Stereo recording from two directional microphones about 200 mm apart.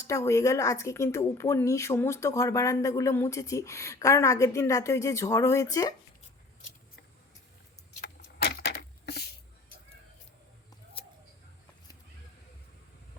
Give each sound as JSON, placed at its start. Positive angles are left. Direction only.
{"t": 0.0, "sound": "speech", "side_deg": 15}
{"t": 8.0, "sound": "vehicle", "side_deg": 60}